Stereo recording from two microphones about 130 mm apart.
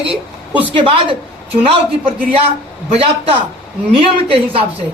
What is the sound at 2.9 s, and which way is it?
A man's voice, 45° right (ahead or behind).